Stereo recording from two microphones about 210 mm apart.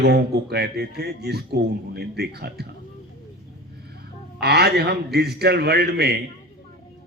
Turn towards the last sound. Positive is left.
turn(degrees=-50)  # may be behind; listen again after turning